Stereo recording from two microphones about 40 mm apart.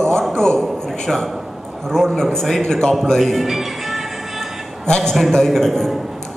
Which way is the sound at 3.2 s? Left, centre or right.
Centre.